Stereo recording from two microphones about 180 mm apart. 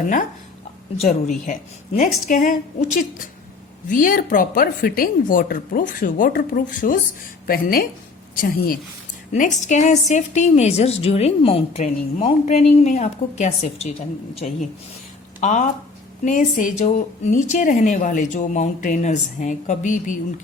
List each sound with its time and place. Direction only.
2.0 s a woman's voice: 50° left (ahead or behind)